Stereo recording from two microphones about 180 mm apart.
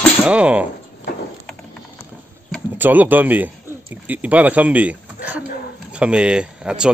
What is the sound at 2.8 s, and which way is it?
Speech, 10° right (ahead or behind).